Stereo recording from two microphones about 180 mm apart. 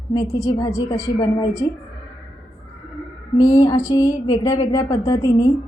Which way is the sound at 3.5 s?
20° left (ahead or behind).